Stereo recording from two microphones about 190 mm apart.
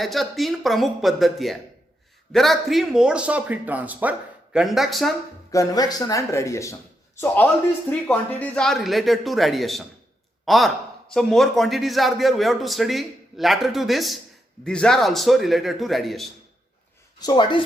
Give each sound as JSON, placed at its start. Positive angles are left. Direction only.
{"t": 0.0, "sound": "a man's voice", "side_deg": 0}
{"t": 5.5, "sound": "a man's voice", "side_deg": 20}
{"t": 17.2, "sound": "speech", "side_deg": 20}